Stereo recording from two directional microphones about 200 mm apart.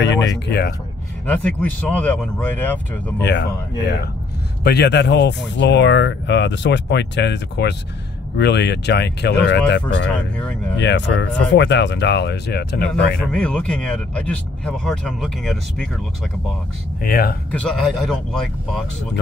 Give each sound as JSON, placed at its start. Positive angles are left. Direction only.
{"t": 0.0, "sound": "speech", "side_deg": 60}
{"t": 1.2, "sound": "speech", "side_deg": 5}
{"t": 3.2, "sound": "speech", "side_deg": 60}
{"t": 4.6, "sound": "speech", "side_deg": 55}
{"t": 10.0, "sound": "speech", "side_deg": 5}
{"t": 10.8, "sound": "speech", "side_deg": 60}
{"t": 13.2, "sound": "speech", "side_deg": 5}
{"t": 17.0, "sound": "speech", "side_deg": 50}
{"t": 17.5, "sound": "speech", "side_deg": 5}